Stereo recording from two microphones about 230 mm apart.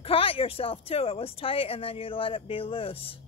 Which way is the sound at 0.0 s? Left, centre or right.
Left.